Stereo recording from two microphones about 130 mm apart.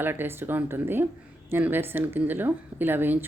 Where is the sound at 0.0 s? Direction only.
15° right (ahead or behind).